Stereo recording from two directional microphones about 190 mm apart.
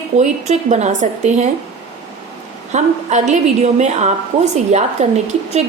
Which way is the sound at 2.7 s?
40° right (ahead or behind).